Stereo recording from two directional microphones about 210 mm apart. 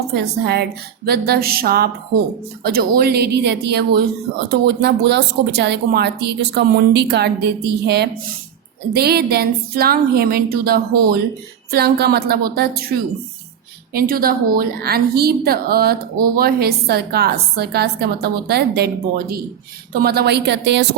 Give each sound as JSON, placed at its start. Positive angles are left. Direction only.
{"t": 0.1, "sound": "a woman's voice", "side_deg": -50}